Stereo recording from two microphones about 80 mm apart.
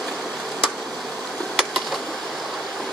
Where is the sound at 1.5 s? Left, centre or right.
Centre.